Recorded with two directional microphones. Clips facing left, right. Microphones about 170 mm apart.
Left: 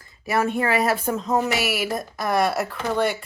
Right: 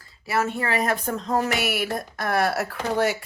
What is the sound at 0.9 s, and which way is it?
Speech, 5° left (ahead or behind).